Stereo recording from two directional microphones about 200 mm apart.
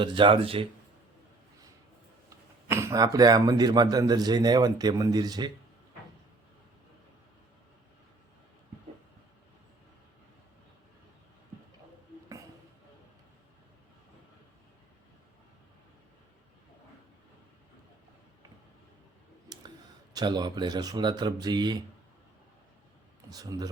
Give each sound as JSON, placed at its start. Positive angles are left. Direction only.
{"t": 0.0, "sound": "a man's voice", "side_deg": -25}
{"t": 2.6, "sound": "a man's voice", "side_deg": -15}
{"t": 20.1, "sound": "a man's voice", "side_deg": -20}
{"t": 23.3, "sound": "a man's voice", "side_deg": -20}